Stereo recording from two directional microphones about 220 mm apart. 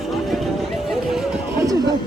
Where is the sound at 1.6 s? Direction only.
15° right (ahead or behind).